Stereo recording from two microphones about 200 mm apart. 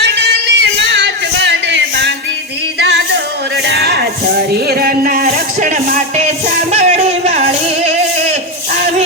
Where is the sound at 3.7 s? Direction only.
55° right (ahead or behind).